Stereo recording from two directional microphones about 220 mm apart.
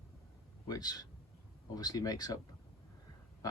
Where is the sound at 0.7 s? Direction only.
15° left (ahead or behind).